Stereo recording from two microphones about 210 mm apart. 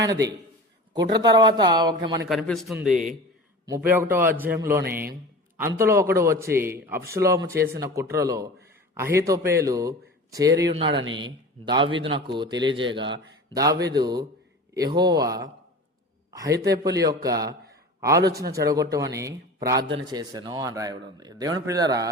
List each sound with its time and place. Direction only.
0.1 s speech: 15° right (ahead or behind)
2.3 s a man's voice: centre (ahead or behind)
4.8 s a man's voice: 45° right (ahead or behind)
5.5 s a man's voice: 10° right (ahead or behind)
18.6 s speech: 15° right (ahead or behind)